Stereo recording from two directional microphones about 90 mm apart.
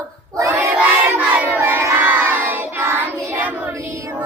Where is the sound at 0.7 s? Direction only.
15° right (ahead or behind).